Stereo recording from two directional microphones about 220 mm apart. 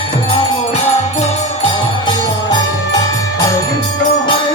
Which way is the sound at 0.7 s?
30° left (ahead or behind).